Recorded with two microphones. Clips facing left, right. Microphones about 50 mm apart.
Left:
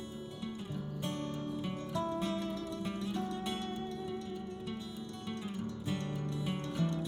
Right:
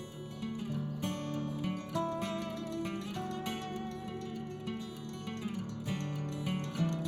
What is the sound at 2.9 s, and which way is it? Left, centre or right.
Music, right.